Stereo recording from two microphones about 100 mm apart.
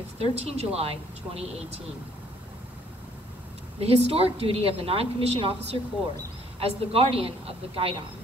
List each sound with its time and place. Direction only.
0.2 s speech: 90° right
3.8 s a woman's voice: 85° right